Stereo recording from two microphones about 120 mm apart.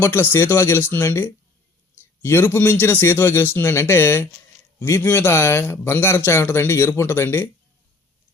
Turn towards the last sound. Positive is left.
turn(degrees=20)  # may be behind; listen again after turning